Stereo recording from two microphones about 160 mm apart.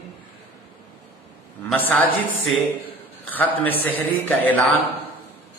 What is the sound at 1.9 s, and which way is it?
Speech, 10° left (ahead or behind).